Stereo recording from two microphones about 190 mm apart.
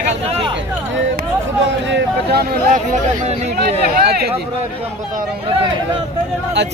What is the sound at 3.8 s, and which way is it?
Speech, 55° right (ahead or behind).